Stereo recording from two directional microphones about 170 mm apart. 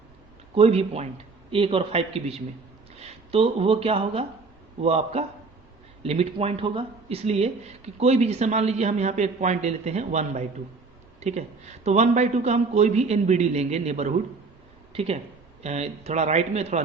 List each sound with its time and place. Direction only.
0.5 s speech: 35° right (ahead or behind)